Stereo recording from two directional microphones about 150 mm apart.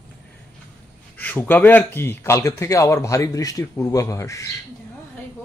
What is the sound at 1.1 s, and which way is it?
Speech, 10° left (ahead or behind).